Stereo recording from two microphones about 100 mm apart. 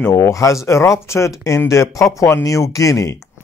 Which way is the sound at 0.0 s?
30° left (ahead or behind).